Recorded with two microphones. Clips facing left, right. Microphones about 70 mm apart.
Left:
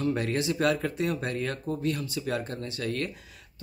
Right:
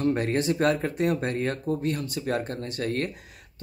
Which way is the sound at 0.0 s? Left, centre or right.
Right.